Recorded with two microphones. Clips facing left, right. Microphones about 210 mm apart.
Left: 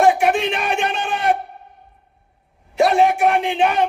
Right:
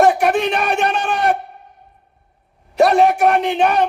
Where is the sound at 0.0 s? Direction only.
40° right (ahead or behind).